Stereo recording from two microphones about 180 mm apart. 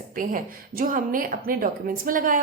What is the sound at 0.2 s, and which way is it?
A woman's voice, 50° right (ahead or behind).